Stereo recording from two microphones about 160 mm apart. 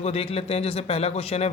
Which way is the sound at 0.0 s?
40° left (ahead or behind).